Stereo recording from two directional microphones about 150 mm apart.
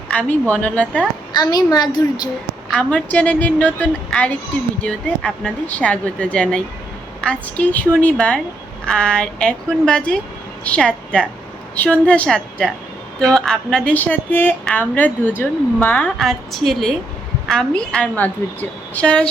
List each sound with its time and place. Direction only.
0.1 s a woman's voice: 10° left (ahead or behind)
1.3 s a woman's voice: 25° left (ahead or behind)
2.7 s a woman's voice: 10° left (ahead or behind)